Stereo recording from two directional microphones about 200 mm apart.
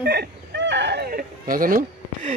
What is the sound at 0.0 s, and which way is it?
Speech, 55° right (ahead or behind).